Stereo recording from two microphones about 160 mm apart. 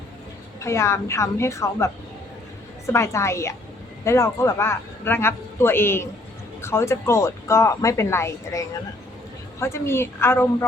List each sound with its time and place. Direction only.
0.6 s a man's voice: 20° left (ahead or behind)